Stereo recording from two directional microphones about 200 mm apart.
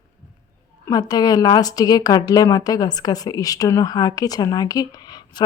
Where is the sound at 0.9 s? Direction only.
20° left (ahead or behind).